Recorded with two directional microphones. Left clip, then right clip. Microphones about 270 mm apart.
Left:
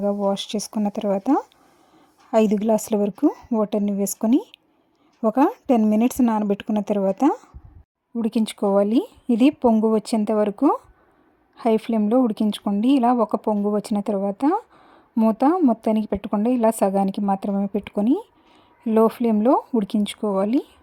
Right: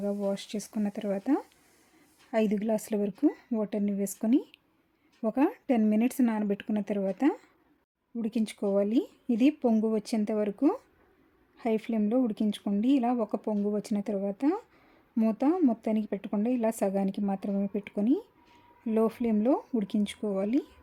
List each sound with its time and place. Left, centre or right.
0.0 s a woman's voice: centre